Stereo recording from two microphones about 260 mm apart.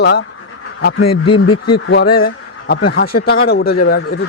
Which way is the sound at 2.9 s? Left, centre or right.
Left.